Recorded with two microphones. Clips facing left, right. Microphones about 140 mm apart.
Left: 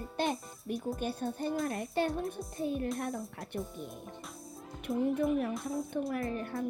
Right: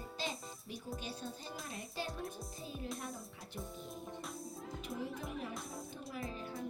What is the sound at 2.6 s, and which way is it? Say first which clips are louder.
Speech: left 13 dB; 60° left (ahead or behind).